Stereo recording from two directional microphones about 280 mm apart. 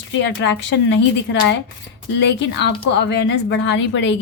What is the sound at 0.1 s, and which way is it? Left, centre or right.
A woman's voice, left.